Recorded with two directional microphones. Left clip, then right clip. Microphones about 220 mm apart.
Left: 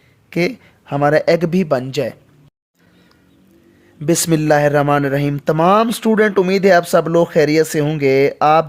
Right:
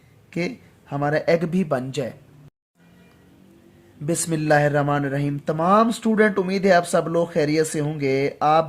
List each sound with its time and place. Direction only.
0.3 s a man's voice: 40° left (ahead or behind)
4.0 s a man's voice: 35° left (ahead or behind)